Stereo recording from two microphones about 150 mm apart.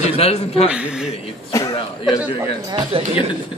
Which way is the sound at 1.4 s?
25° left (ahead or behind).